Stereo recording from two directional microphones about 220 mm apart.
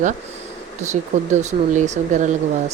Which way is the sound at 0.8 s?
30° right (ahead or behind).